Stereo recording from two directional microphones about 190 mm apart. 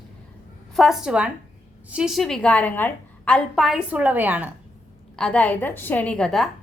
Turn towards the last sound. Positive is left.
turn(degrees=5)  # may be behind; listen again after turning